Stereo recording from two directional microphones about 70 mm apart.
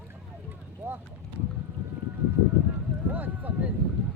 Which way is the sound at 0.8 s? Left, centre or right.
Right.